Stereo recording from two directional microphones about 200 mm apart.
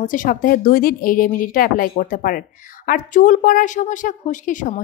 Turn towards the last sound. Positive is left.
turn(degrees=40)  # may be behind; listen again after turning